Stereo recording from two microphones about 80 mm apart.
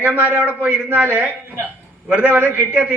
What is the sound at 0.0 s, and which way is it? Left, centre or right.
A man's voice, centre.